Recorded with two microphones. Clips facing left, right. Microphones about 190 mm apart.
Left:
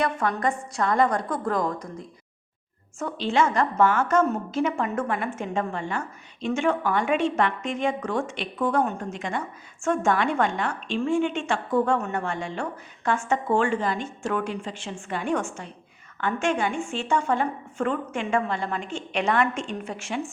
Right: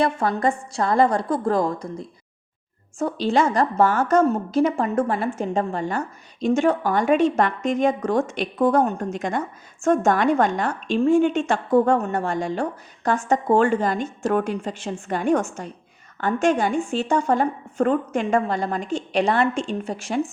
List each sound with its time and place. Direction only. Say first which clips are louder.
0.0 s a woman's voice: right 4 dB; 30° right (ahead or behind)